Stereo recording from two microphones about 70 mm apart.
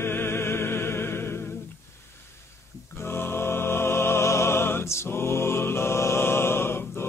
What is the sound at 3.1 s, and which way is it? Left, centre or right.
Music, left.